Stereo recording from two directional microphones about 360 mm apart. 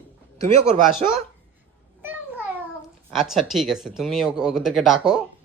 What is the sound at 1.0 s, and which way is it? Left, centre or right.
Speech, centre.